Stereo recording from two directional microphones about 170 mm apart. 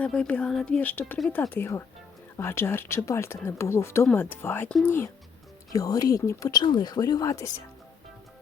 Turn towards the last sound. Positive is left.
turn(degrees=20)  # may be behind; listen again after turning